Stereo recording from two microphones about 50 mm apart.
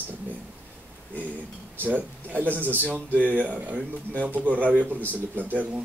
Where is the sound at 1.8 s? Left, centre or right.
Right.